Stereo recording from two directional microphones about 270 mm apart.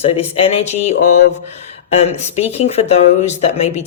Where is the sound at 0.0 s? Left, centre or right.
Left.